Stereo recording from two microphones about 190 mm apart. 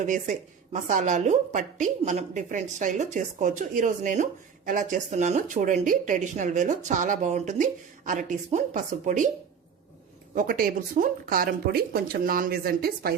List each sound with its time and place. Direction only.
0.0 s a woman's voice: 40° right (ahead or behind)
10.3 s speech: 50° right (ahead or behind)